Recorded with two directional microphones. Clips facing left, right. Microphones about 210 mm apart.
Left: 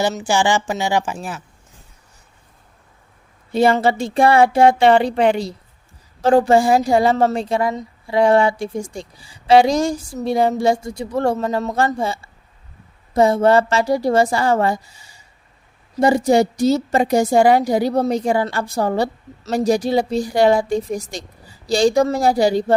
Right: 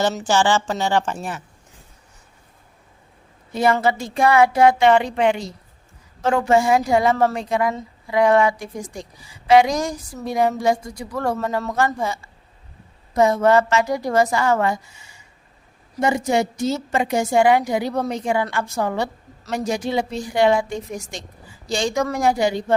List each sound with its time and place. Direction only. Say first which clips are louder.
0.3 s speech: even; 15° left (ahead or behind)
3.5 s a woman's voice: left 3 dB; 30° left (ahead or behind)